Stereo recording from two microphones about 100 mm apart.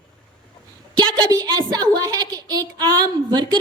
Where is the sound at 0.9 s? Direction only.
40° right (ahead or behind).